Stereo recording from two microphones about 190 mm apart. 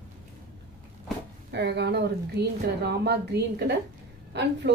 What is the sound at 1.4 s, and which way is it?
A woman's voice, 60° right (ahead or behind).